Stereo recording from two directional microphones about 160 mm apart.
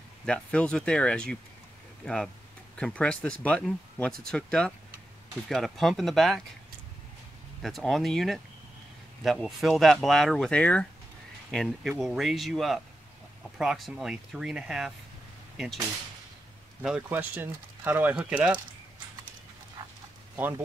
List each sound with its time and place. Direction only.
0.2 s speech: 5° left (ahead or behind)
7.6 s speech: centre (ahead or behind)
16.8 s speech: 10° right (ahead or behind)
20.3 s speech: 10° right (ahead or behind)